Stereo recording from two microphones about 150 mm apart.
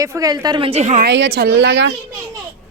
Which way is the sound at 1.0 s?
90° right.